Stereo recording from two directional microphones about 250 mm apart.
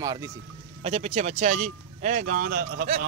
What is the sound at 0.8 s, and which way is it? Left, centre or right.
Speech, right.